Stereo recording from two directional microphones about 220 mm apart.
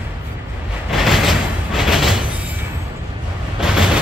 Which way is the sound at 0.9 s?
Centre (ahead or behind).